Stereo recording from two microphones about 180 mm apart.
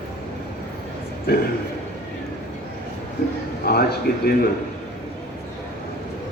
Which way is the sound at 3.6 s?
60° left (ahead or behind).